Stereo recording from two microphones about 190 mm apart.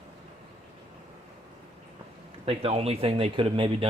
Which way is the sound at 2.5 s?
30° right (ahead or behind).